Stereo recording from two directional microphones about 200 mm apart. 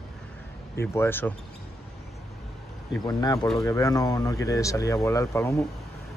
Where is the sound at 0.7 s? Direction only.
10° left (ahead or behind).